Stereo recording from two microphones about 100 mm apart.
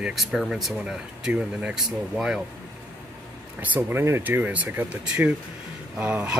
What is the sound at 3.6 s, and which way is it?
Speech, 15° right (ahead or behind).